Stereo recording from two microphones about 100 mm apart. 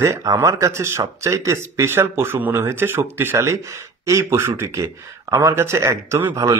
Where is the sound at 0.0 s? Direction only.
35° right (ahead or behind).